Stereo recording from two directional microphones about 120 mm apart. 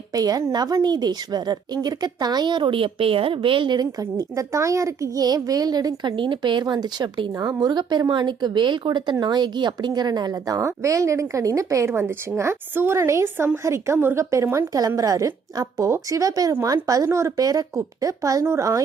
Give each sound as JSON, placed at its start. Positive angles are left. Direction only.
{"t": 0.1, "sound": "a woman's voice", "side_deg": -30}